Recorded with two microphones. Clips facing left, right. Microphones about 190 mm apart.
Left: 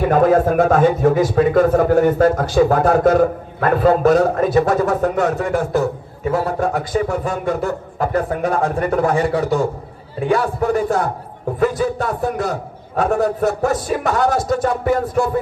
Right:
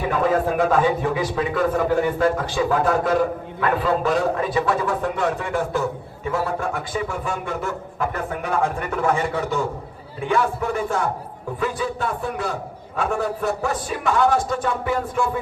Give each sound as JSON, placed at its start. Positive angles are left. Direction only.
{"t": 0.1, "sound": "a man's voice", "side_deg": 45}